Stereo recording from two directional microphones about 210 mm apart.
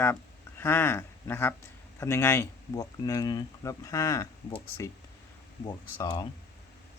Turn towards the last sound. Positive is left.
turn(degrees=20)  # may be behind; listen again after turning